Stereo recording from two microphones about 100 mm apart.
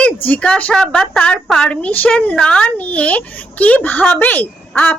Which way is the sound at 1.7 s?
15° left (ahead or behind).